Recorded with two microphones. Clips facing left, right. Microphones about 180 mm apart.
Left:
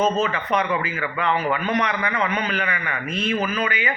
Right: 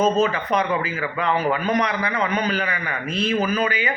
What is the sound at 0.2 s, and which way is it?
A man's voice, 35° right (ahead or behind).